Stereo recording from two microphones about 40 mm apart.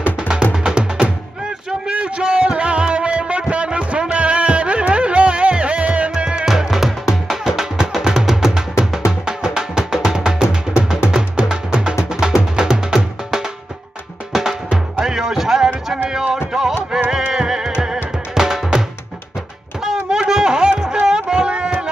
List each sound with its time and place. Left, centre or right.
0.3 s music: right
1.9 s music: right
6.1 s music: right
6.4 s music: centre
19.8 s a sound: centre